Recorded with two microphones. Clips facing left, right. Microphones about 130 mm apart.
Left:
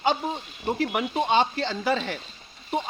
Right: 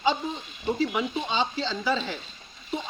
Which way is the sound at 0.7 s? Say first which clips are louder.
Left 2 dB; 60° left (ahead or behind).